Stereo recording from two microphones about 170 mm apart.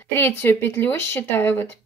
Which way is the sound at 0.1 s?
15° left (ahead or behind).